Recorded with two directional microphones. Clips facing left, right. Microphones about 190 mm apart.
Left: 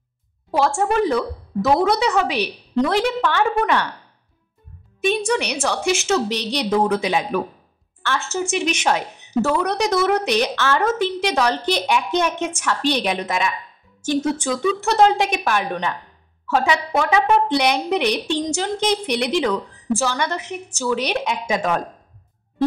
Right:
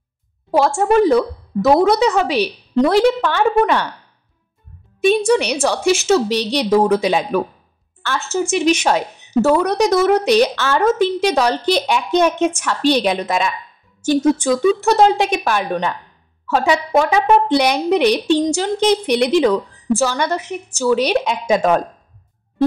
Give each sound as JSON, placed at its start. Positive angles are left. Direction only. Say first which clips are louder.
{"t": 0.5, "sound": "a woman's voice", "louder": "right 4 dB", "side_deg": -35}
{"t": 5.0, "sound": "a woman's voice", "louder": "right 6 dB", "side_deg": -35}
{"t": 15.0, "sound": "a woman's voice", "louder": "right 2 dB", "side_deg": -30}